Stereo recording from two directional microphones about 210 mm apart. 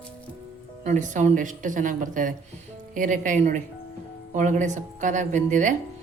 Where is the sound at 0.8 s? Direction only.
35° right (ahead or behind).